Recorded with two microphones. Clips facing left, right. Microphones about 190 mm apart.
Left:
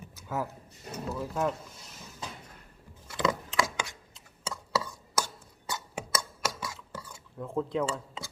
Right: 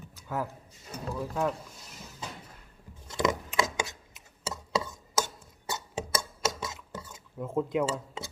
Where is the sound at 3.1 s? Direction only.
20° right (ahead or behind).